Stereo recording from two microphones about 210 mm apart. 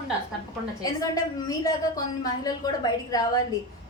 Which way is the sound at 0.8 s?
15° left (ahead or behind).